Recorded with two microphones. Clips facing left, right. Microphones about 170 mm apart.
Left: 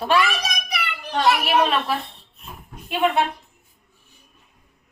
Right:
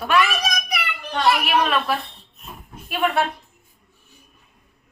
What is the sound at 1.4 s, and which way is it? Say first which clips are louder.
A woman's voice: left 1 dB; 25° left (ahead or behind).